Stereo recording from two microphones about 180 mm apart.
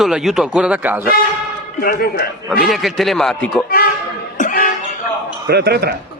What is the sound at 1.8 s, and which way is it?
Speech, 60° left (ahead or behind).